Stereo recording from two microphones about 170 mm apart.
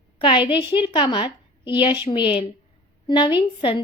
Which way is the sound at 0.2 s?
30° left (ahead or behind).